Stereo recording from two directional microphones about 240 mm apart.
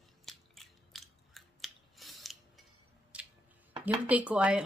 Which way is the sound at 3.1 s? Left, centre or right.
Centre.